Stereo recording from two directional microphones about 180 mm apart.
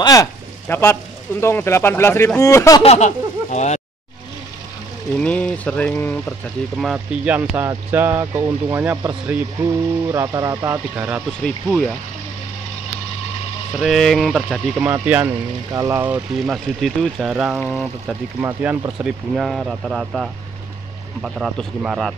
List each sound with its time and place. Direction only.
0.0 s speech: 20° left (ahead or behind)
2.8 s speech: 40° left (ahead or behind)
5.1 s speech: 5° left (ahead or behind)
6.8 s speech: 5° right (ahead or behind)
11.4 s speech: 5° left (ahead or behind)
13.7 s speech: centre (ahead or behind)